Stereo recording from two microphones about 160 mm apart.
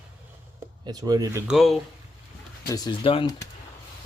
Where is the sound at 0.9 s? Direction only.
25° right (ahead or behind).